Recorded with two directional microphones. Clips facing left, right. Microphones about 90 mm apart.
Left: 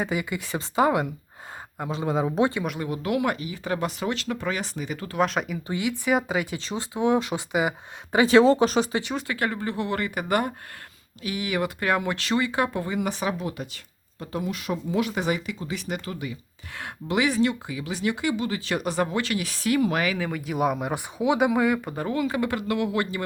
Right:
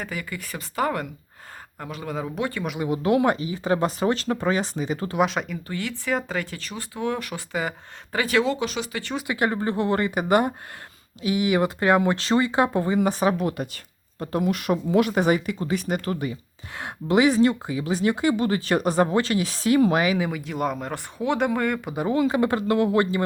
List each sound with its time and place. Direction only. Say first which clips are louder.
0.0 s speech: left 5 dB; 20° left (ahead or behind)
2.6 s speech: right 2 dB; 10° right (ahead or behind)
2.9 s speech: right 6 dB; 30° right (ahead or behind)
5.2 s speech: even; centre (ahead or behind)
5.6 s speech: left 3 dB; 15° left (ahead or behind); by 9.0 s 35° left (ahead or behind)
9.2 s speech: right 3 dB; 20° right (ahead or behind)
9.5 s speech: right 4 dB; 30° right (ahead or behind)
20.3 s speech: left 2 dB; 5° left (ahead or behind)
21.8 s speech: right 3 dB; 15° right (ahead or behind)
22.1 s speech: right 5 dB; 25° right (ahead or behind)